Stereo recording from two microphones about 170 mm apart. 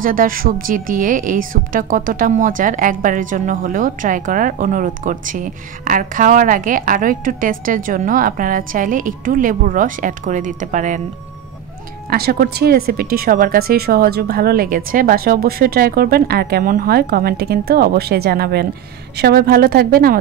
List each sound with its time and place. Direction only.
0.0 s a woman's voice: 55° right (ahead or behind)
12.1 s speech: 65° right (ahead or behind)